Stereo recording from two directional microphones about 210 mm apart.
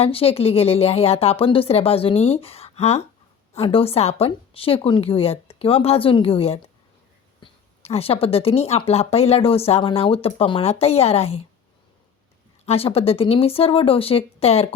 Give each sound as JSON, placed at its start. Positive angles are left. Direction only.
{"t": 0.0, "sound": "speech", "side_deg": 25}
{"t": 12.6, "sound": "speech", "side_deg": 30}